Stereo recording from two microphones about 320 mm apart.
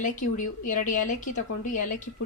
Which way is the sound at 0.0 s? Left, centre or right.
Left.